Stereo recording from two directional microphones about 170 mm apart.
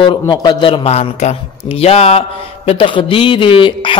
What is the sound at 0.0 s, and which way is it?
Mantra, 25° left (ahead or behind).